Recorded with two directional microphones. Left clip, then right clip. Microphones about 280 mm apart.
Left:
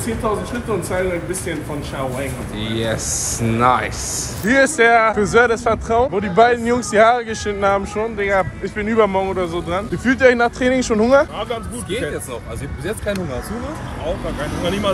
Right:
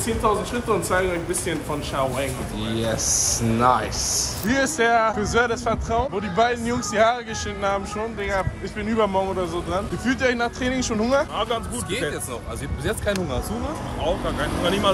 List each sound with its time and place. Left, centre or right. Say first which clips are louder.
0.8 s speech: left 1 dB; centre
2.6 s a man's voice: left 4 dB; centre
2.9 s speech: even; centre
3.5 s a man's voice: left 4 dB; centre
5.1 s speech: left 7 dB; centre
14.2 s speech: left 1 dB; right